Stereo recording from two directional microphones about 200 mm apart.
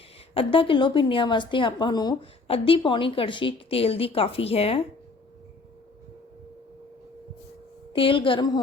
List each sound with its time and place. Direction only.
0.3 s a woman's voice: 25° left (ahead or behind)
7.9 s a woman's voice: 25° left (ahead or behind)